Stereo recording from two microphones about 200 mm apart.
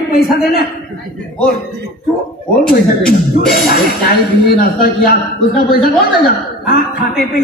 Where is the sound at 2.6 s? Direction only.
50° left (ahead or behind).